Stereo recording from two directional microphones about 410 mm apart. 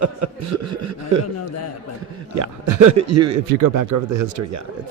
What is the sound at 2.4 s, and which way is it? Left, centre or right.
A man's voice, right.